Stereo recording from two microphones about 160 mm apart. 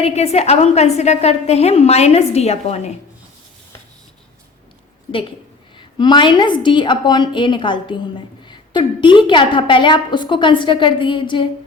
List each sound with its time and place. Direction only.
0.0 s a woman's voice: 40° left (ahead or behind)
5.7 s a woman's voice: 30° left (ahead or behind)